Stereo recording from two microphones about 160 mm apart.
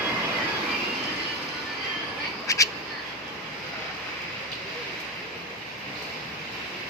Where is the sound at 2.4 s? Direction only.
20° left (ahead or behind).